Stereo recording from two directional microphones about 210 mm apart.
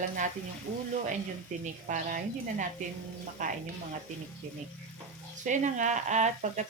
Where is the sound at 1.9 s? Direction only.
40° right (ahead or behind).